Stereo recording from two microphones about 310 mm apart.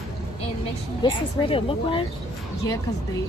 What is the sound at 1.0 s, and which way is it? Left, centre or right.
Speech, centre.